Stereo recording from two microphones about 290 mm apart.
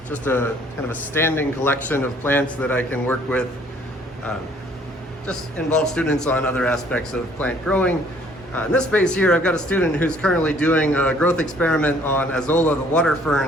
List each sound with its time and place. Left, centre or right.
0.1 s a man's voice: centre
5.3 s speech: centre